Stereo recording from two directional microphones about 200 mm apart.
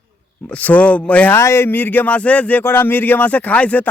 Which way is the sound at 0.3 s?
5° left (ahead or behind).